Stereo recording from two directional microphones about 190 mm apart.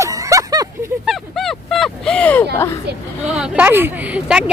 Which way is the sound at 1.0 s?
Centre (ahead or behind).